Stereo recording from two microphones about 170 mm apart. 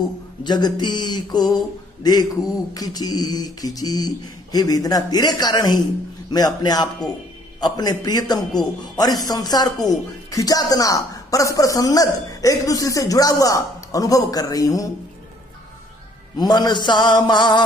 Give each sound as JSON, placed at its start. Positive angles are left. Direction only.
{"t": 0.4, "sound": "speech", "side_deg": 25}
{"t": 2.7, "sound": "speech", "side_deg": 20}
{"t": 16.3, "sound": "speech", "side_deg": 25}